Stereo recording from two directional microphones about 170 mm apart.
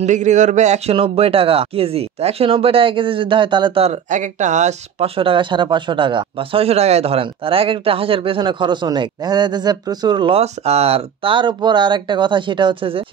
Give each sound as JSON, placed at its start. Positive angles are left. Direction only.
{"t": 0.0, "sound": "a man's voice", "side_deg": -45}